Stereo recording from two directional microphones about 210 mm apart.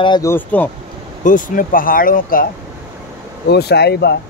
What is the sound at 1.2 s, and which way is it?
Speech, 40° left (ahead or behind).